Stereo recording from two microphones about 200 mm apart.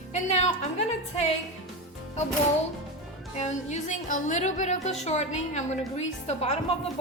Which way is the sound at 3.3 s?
35° left (ahead or behind).